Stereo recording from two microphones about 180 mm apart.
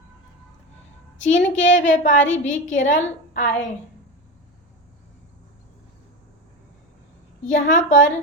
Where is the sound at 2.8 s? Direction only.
45° left (ahead or behind).